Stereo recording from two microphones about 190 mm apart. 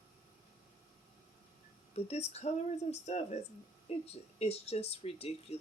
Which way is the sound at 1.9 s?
35° left (ahead or behind).